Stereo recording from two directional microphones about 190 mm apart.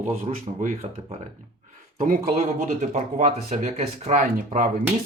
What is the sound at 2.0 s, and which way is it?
Speech, 40° right (ahead or behind).